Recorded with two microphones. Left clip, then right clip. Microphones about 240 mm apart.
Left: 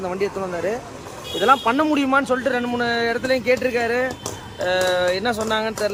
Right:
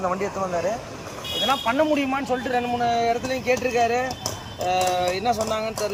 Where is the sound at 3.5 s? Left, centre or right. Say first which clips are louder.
Left 3 dB; left.